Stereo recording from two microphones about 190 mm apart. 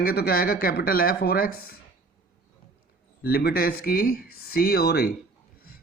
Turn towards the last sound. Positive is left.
turn(degrees=55)  # may be behind; listen again after turning